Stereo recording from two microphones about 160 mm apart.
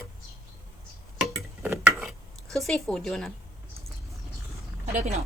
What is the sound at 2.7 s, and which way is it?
Speech, centre (ahead or behind).